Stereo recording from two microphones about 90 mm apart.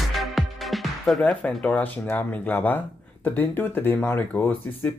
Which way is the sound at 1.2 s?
15° left (ahead or behind).